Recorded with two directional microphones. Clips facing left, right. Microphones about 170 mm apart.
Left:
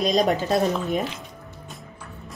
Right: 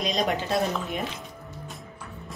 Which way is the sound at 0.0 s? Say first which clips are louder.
Left 6 dB; 45° left (ahead or behind).